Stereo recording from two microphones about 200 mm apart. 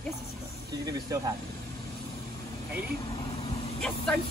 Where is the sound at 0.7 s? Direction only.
20° right (ahead or behind).